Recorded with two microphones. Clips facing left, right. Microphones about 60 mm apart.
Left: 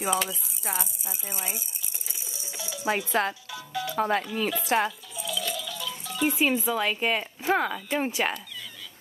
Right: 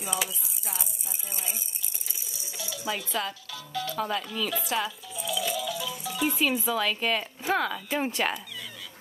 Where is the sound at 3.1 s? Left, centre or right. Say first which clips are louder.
Left 6 dB; left.